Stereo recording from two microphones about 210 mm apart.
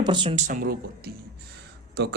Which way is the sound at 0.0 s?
20° right (ahead or behind).